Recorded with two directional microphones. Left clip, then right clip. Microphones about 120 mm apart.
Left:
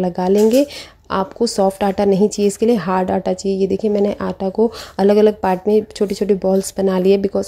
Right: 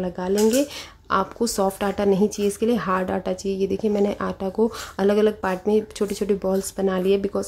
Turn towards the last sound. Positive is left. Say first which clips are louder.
# left 7 dB
turn(degrees=30)  # may be behind; listen again after turning